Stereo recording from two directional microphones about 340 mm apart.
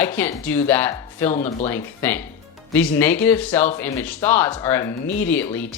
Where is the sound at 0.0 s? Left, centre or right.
Centre.